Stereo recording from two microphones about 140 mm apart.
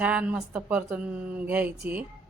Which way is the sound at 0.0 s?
10° right (ahead or behind).